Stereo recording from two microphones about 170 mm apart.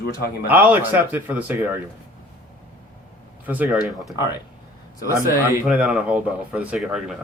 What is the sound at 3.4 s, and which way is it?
Speech, 10° right (ahead or behind).